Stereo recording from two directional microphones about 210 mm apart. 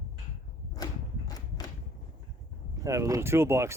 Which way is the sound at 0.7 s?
20° left (ahead or behind).